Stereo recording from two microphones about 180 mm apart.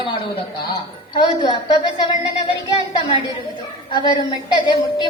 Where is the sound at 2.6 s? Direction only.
30° left (ahead or behind).